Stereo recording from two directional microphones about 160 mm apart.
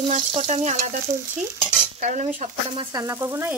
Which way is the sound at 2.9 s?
20° right (ahead or behind).